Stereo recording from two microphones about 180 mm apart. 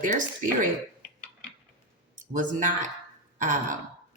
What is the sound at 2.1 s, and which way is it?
Speech, 45° right (ahead or behind).